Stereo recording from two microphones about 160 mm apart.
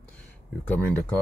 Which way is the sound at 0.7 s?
10° left (ahead or behind).